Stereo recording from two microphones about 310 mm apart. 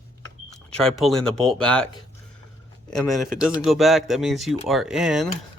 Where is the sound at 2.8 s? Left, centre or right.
Centre.